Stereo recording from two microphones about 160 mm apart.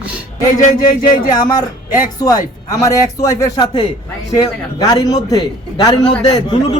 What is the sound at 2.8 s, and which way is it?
A man's voice, 20° left (ahead or behind).